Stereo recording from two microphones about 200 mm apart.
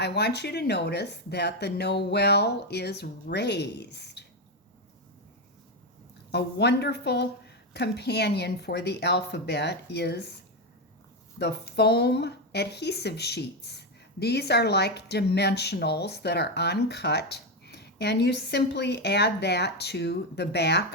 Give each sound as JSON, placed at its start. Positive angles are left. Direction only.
{"t": 0.0, "sound": "speech", "side_deg": 55}
{"t": 6.3, "sound": "speech", "side_deg": 55}
{"t": 11.3, "sound": "speech", "side_deg": 55}